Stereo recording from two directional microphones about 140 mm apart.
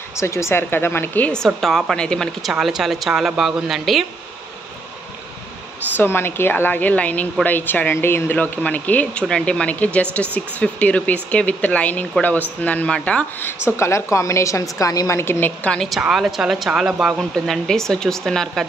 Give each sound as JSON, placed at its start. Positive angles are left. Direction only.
{"t": 0.2, "sound": "a woman's voice", "side_deg": 20}
{"t": 5.9, "sound": "a woman's voice", "side_deg": 15}